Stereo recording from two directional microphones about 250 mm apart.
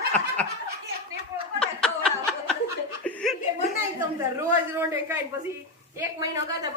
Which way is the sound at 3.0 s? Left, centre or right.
Centre.